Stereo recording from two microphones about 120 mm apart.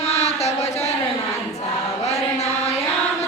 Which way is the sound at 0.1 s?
65° left (ahead or behind).